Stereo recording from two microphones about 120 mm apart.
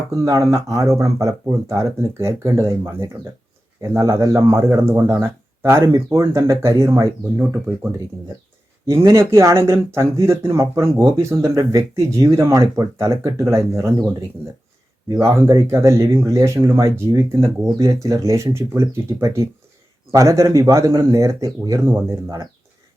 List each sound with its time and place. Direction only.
0.1 s speech: 25° right (ahead or behind)